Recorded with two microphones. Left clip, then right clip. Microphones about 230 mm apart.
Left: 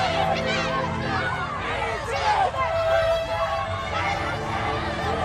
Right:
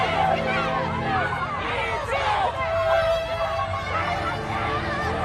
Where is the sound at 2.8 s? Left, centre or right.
Centre.